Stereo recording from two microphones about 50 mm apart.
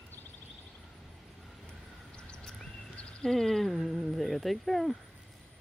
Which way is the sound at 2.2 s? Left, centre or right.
Centre.